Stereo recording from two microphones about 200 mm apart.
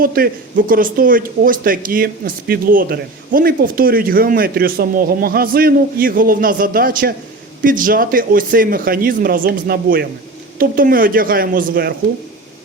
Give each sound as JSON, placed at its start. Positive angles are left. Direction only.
{"t": 0.0, "sound": "speech", "side_deg": -45}